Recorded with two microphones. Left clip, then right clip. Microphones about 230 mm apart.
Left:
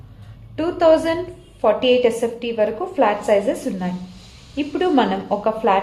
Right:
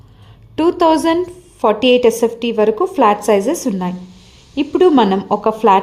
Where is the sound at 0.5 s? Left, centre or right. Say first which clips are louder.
Right 2 dB; right.